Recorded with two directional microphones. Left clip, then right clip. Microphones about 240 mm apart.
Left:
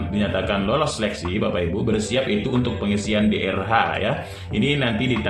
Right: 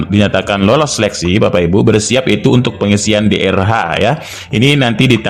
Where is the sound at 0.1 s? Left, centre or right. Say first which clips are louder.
Right 10 dB; right.